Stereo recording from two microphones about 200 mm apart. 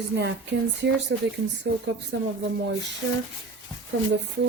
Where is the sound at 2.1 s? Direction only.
65° right (ahead or behind).